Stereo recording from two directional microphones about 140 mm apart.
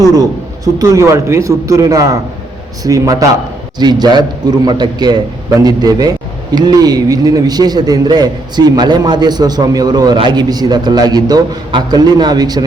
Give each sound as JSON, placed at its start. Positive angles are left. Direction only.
{"t": 0.1, "sound": "a man's voice", "side_deg": -25}